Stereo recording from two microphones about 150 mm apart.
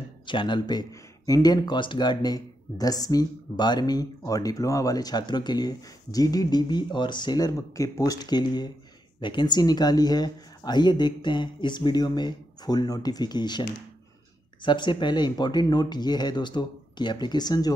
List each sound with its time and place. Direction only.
0.3 s speech: 30° left (ahead or behind)